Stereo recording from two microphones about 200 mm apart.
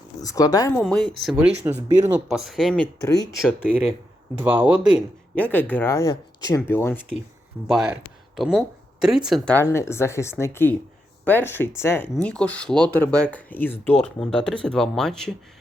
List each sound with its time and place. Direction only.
0.2 s speech: 15° left (ahead or behind)
0.8 s speech: 5° left (ahead or behind)
4.4 s speech: 5° right (ahead or behind)
5.3 s speech: 10° left (ahead or behind)
7.7 s speech: centre (ahead or behind)